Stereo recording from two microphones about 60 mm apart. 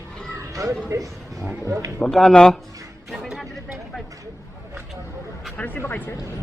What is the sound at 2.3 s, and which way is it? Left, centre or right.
Speech, centre.